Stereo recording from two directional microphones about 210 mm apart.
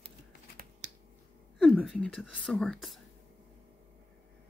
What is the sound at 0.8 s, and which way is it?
Finger snapping, 35° right (ahead or behind).